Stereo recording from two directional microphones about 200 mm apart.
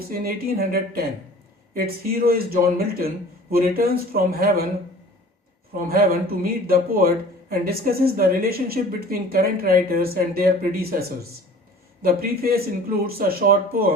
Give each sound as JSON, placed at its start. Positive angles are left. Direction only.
{"t": 0.3, "sound": "speech", "side_deg": -50}
{"t": 5.9, "sound": "speech", "side_deg": -50}
{"t": 12.0, "sound": "speech", "side_deg": -50}